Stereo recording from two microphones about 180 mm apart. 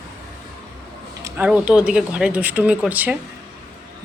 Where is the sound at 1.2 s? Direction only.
15° right (ahead or behind).